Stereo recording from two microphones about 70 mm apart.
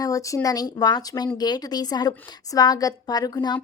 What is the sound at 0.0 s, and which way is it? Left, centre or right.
Speech, left.